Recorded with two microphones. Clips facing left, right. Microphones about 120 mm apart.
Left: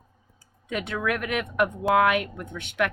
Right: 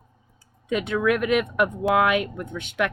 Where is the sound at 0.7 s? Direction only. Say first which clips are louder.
Right 6 dB; 20° right (ahead or behind).